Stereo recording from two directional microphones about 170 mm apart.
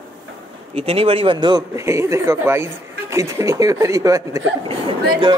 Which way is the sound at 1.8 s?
15° right (ahead or behind).